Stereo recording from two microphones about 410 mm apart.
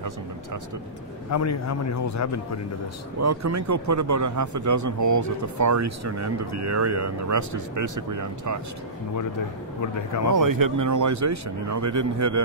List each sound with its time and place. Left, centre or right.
1.3 s a man's voice: left
3.2 s a man's voice: right
9.8 s speech: left
10.3 s a man's voice: right